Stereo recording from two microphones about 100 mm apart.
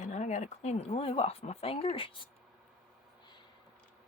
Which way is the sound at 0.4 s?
90° left.